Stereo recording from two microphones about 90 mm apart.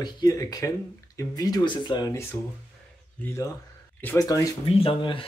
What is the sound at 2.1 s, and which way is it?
Speech, 30° left (ahead or behind).